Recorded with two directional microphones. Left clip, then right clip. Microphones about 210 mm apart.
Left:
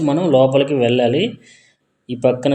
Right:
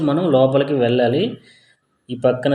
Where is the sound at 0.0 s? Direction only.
15° left (ahead or behind).